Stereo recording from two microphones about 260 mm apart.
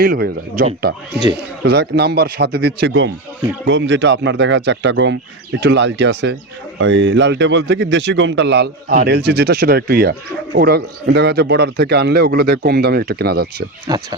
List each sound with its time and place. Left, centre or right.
0.0 s speech: right
13.8 s speech: centre